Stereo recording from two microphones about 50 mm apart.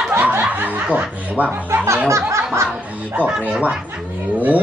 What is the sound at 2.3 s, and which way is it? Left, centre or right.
Music, right.